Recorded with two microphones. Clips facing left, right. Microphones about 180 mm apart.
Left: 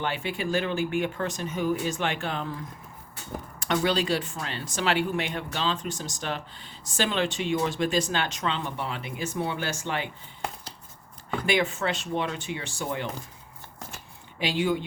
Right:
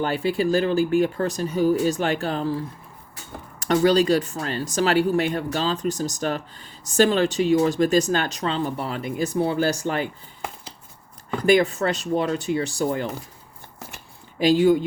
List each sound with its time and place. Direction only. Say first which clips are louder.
0.0 s speech: right 8 dB; 40° right (ahead or behind)
11.3 s speech: right 8 dB; 40° right (ahead or behind)
14.3 s speech: right 9 dB; 40° right (ahead or behind)